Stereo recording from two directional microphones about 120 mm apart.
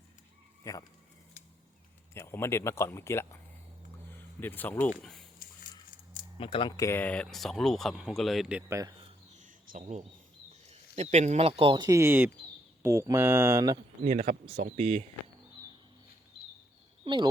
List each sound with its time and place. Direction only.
0.6 s speech: 30° left (ahead or behind)
2.1 s speech: 25° left (ahead or behind)
6.4 s speech: 45° left (ahead or behind)
6.7 s speech: 20° left (ahead or behind); by 8.6 s 5° right (ahead or behind)
8.7 s mantra: 30° right (ahead or behind)
9.3 s a sound: 85° right
10.7 s speech: 65° right (ahead or behind)
11.8 s mantra: 25° right (ahead or behind)
14.0 s speech: 80° right
14.8 s speech: 65° right (ahead or behind)
17.0 s a sound: 40° right (ahead or behind)